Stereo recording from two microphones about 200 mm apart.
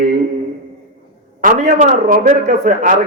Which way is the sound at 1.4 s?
45° right (ahead or behind).